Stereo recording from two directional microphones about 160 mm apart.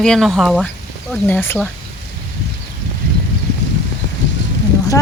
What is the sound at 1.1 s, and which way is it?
Speech, 10° left (ahead or behind).